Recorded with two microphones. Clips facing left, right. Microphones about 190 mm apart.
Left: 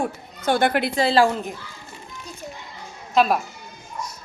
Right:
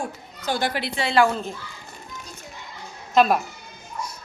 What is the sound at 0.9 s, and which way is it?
Speech, 35° left (ahead or behind).